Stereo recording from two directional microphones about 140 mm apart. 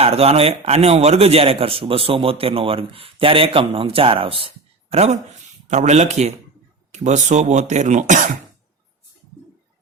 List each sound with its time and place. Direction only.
0.0 s a man's voice: 45° right (ahead or behind)